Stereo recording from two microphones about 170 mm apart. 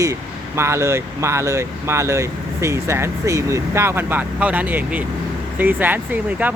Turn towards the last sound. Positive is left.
turn(degrees=-10)  # may be behind; listen again after turning